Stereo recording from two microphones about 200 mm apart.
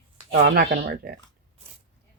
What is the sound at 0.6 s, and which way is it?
Speech, 50° right (ahead or behind).